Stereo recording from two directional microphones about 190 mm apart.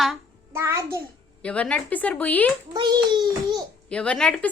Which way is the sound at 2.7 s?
25° right (ahead or behind).